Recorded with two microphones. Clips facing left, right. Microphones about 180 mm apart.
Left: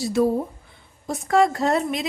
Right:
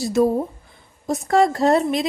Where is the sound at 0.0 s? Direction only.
45° right (ahead or behind).